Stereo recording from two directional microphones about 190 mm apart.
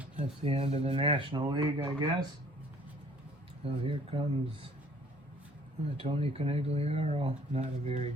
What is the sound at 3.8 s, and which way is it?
Speech, 30° right (ahead or behind).